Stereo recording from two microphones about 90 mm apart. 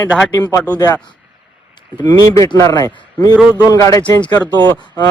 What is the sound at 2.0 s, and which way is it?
Speech, 40° left (ahead or behind).